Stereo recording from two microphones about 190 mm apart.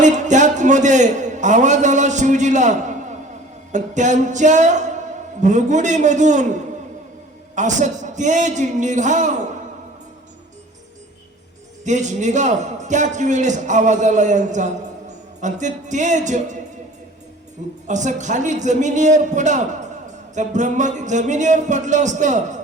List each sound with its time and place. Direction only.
0.0 s a man's voice: 40° right (ahead or behind)
3.7 s music: 40° right (ahead or behind)
11.9 s music: 40° right (ahead or behind)
17.8 s music: 40° right (ahead or behind)